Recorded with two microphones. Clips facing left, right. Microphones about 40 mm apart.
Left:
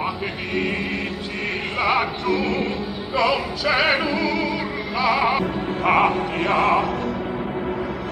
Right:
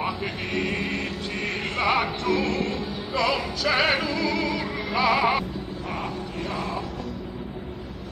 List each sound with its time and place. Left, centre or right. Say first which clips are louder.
1.8 s music: left 3 dB; centre
4.3 s music: left 3 dB; centre
5.4 s music: left 10 dB; left